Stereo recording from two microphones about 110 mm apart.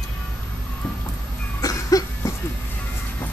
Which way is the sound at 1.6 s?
35° left (ahead or behind).